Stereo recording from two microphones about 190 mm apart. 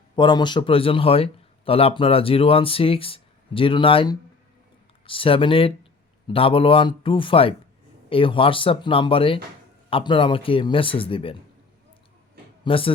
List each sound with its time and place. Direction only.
0.2 s speech: 25° left (ahead or behind)
12.6 s speech: 30° left (ahead or behind)